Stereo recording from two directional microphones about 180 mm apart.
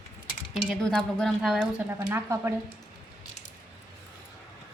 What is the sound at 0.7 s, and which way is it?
Speech, 5° left (ahead or behind).